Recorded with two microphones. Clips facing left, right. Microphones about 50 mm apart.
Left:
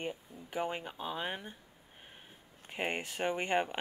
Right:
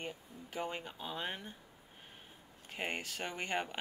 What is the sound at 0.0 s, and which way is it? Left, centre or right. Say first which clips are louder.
Speech: left 4 dB; centre.